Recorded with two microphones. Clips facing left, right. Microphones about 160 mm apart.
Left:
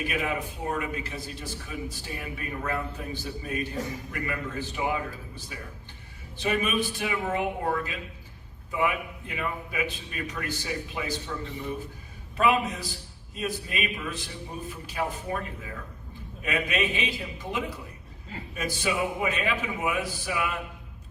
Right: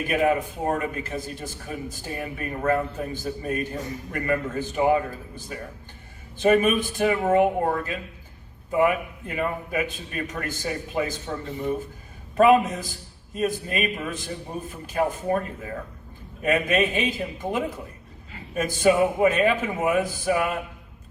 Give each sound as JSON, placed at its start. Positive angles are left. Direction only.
{"t": 0.1, "sound": "a man's voice", "side_deg": -45}